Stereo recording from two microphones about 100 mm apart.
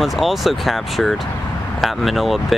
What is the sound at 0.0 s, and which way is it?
Speech, centre (ahead or behind).